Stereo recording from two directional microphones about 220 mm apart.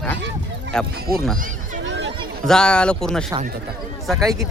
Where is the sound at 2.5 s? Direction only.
5° left (ahead or behind).